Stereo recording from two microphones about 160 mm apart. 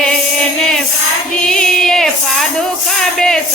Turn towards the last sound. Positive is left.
turn(degrees=5)  # may be behind; listen again after turning